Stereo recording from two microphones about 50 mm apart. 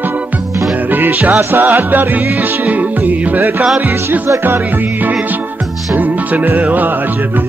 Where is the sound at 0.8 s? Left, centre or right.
Right.